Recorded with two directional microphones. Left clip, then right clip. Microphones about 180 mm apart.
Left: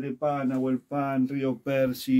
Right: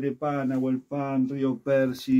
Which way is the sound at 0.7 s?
55° left (ahead or behind).